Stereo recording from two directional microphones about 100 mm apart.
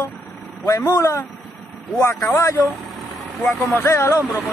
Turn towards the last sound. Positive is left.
turn(degrees=30)  # may be behind; listen again after turning